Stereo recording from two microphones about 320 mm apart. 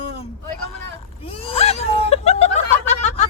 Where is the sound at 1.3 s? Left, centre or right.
Centre.